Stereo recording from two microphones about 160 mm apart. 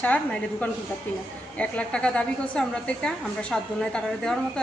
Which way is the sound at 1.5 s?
10° left (ahead or behind).